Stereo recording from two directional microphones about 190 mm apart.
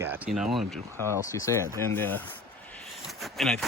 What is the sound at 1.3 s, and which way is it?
Speech, 15° left (ahead or behind).